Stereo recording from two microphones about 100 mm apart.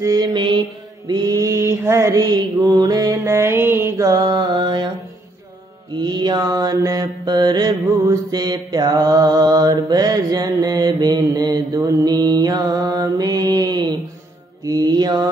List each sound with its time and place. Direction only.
0.0 s mantra: 40° right (ahead or behind)
1.0 s mantra: 40° right (ahead or behind); by 4.1 s 25° right (ahead or behind)
4.1 s mantra: 40° right (ahead or behind)
5.9 s mantra: 45° right (ahead or behind)